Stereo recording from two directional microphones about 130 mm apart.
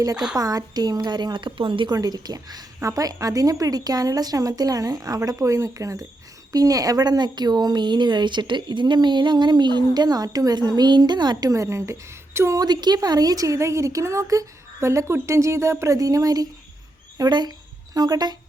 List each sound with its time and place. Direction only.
0.3 s a woman's voice: 30° right (ahead or behind)